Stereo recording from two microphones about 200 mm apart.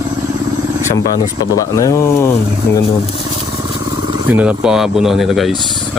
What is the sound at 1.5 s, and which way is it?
Speech, 15° left (ahead or behind).